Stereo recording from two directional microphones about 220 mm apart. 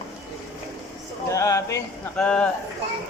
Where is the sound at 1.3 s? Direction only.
15° left (ahead or behind).